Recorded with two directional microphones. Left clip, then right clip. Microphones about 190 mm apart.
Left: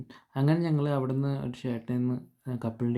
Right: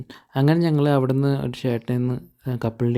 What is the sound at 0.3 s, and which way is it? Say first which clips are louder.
Speech: right 8 dB; 45° right (ahead or behind).